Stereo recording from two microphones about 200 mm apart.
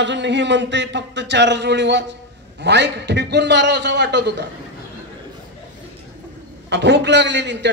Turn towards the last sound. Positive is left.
turn(degrees=-60)  # may be behind; listen again after turning